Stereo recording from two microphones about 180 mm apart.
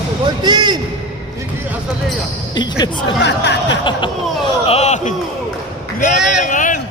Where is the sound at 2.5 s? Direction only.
25° left (ahead or behind).